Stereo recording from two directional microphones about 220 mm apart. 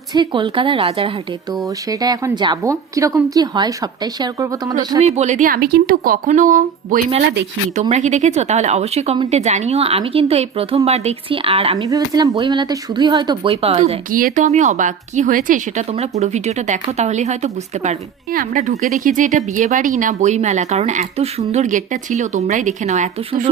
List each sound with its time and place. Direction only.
0.1 s a woman's voice: 20° right (ahead or behind)
4.9 s speech: 30° right (ahead or behind)